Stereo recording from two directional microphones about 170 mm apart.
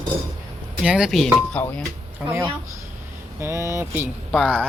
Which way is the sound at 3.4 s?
15° right (ahead or behind).